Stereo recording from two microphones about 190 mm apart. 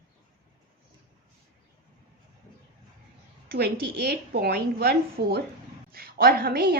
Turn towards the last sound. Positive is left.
turn(degrees=-50)  # may be behind; listen again after turning